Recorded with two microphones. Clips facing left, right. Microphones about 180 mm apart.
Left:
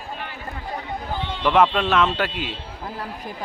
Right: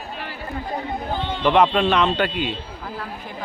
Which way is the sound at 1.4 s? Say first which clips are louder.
Right 1 dB; 5° left (ahead or behind).